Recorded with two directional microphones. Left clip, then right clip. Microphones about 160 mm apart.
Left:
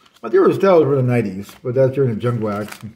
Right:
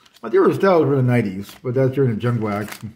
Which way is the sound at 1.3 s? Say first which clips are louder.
Left 4 dB; 15° right (ahead or behind).